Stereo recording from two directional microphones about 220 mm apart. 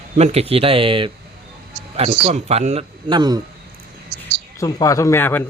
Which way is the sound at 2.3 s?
30° right (ahead or behind).